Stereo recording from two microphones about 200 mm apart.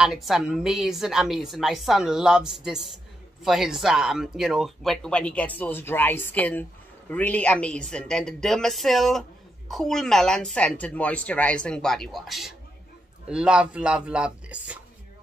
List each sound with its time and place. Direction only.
0.0 s speech: centre (ahead or behind)